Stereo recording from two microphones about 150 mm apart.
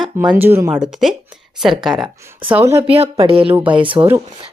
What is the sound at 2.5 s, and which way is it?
Speech, 15° right (ahead or behind).